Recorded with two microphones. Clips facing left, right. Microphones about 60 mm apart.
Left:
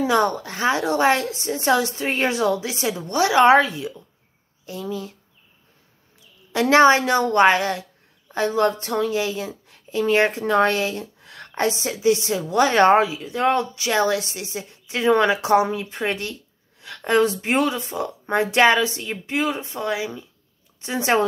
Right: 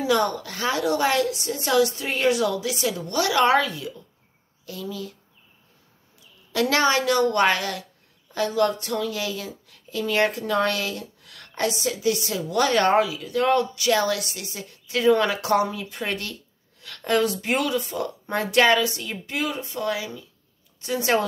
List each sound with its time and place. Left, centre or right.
0.0 s speech: left
6.5 s speech: left